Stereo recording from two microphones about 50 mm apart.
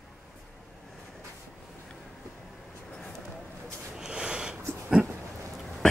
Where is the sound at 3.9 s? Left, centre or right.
Centre.